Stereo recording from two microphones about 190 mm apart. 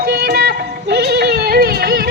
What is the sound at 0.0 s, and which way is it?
Music, 55° right (ahead or behind).